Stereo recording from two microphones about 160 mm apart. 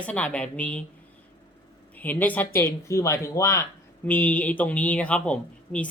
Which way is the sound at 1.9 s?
10° left (ahead or behind).